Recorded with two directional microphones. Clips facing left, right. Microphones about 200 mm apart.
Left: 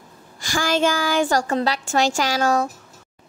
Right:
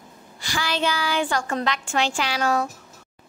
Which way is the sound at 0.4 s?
45° left (ahead or behind).